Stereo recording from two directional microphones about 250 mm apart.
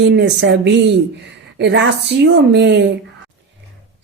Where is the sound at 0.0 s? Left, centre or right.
Right.